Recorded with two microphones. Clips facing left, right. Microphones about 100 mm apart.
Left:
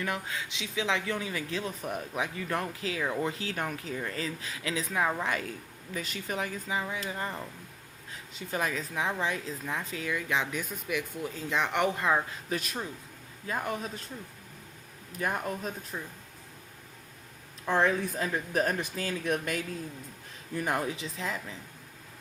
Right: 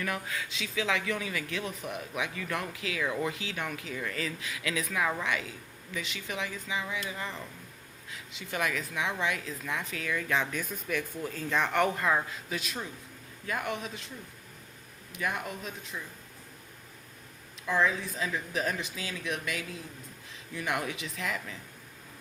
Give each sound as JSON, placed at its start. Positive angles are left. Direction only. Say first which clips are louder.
{"t": 0.0, "sound": "speech", "louder": "left 1 dB", "side_deg": 25}
{"t": 5.2, "sound": "speech", "louder": "left 1 dB", "side_deg": 40}
{"t": 10.2, "sound": "speech", "louder": "right 1 dB", "side_deg": 15}
{"t": 12.5, "sound": "a man's voice", "louder": "left 3 dB", "side_deg": 45}
{"t": 13.5, "sound": "speech", "louder": "left 1 dB", "side_deg": 30}
{"t": 15.1, "sound": "speech", "louder": "left 2 dB", "side_deg": 40}
{"t": 17.7, "sound": "speech", "louder": "left 2 dB", "side_deg": 55}